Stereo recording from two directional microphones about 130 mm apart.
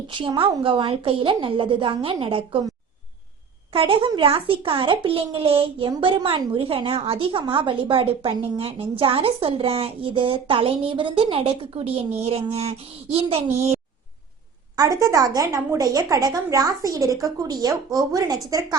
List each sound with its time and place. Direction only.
0.1 s a woman's voice: 40° right (ahead or behind)
3.7 s a child's voice: 45° right (ahead or behind)
14.8 s a woman's voice: 25° right (ahead or behind)